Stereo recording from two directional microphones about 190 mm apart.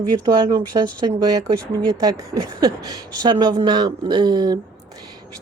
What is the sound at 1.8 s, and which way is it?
Speech, 20° right (ahead or behind).